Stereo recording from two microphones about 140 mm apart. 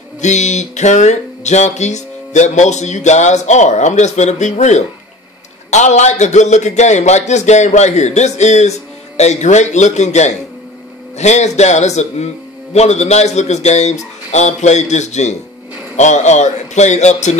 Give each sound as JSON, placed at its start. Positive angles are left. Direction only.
{"t": 0.2, "sound": "music", "side_deg": 55}
{"t": 11.1, "sound": "speech", "side_deg": 55}
{"t": 16.0, "sound": "music", "side_deg": 55}